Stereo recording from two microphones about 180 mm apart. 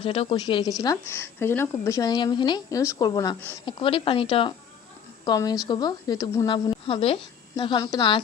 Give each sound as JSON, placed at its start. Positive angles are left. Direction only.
{"t": 0.0, "sound": "a woman's voice", "side_deg": 30}